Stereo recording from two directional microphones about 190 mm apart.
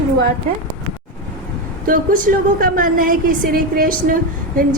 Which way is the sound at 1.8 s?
45° right (ahead or behind).